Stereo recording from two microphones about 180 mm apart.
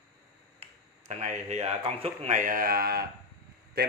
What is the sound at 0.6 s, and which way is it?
Speech, 40° right (ahead or behind).